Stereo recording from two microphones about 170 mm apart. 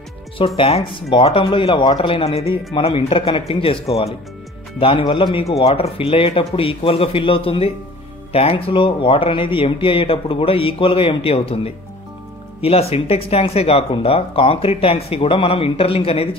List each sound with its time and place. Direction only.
0.6 s speech: 35° left (ahead or behind)